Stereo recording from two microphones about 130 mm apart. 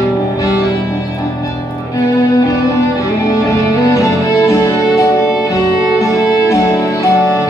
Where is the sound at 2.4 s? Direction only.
25° left (ahead or behind).